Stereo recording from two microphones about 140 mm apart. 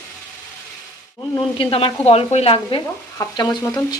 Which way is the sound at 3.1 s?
30° left (ahead or behind).